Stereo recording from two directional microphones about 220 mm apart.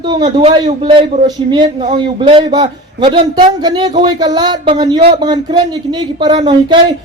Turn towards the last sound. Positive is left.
turn(degrees=-20)  # may be behind; listen again after turning